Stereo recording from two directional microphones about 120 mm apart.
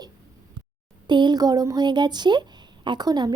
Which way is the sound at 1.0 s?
40° right (ahead or behind).